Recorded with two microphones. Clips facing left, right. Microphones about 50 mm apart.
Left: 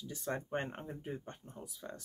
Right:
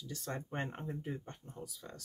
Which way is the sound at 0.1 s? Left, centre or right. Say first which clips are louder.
Left 4 dB; centre.